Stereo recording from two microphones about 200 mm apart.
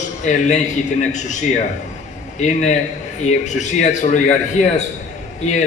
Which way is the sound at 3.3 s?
35° left (ahead or behind).